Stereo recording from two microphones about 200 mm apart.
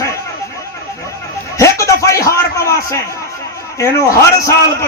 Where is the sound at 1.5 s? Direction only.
15° left (ahead or behind).